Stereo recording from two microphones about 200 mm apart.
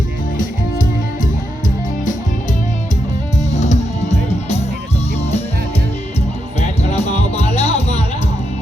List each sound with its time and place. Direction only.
0.3 s music: 40° left (ahead or behind)
3.5 s music: 35° left (ahead or behind)
6.6 s music: 30° left (ahead or behind)